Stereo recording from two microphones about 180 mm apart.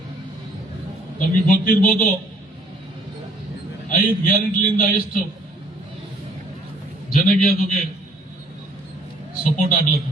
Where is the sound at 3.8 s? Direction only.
50° left (ahead or behind).